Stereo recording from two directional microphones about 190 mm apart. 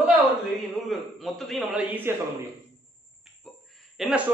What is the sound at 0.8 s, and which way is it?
A man's voice, centre (ahead or behind).